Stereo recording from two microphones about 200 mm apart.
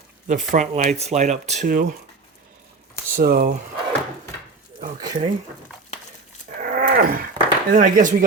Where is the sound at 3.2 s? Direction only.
45° right (ahead or behind).